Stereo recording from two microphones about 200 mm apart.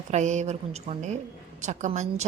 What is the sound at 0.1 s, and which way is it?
Speech, 35° right (ahead or behind).